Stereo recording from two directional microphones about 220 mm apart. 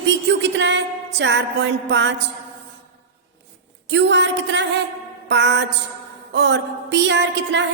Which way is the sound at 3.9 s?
55° right (ahead or behind).